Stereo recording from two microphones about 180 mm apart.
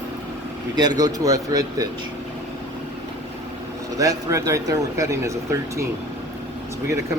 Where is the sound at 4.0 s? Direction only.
20° right (ahead or behind).